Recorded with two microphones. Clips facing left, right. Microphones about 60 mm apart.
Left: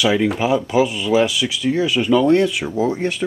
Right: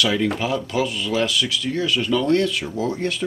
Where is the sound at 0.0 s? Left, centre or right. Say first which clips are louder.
Left 4 dB; centre.